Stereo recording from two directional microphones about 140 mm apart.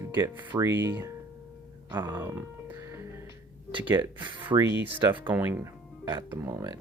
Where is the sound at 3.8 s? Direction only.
10° right (ahead or behind).